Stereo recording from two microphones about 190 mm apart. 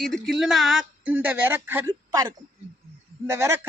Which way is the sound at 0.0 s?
Centre (ahead or behind).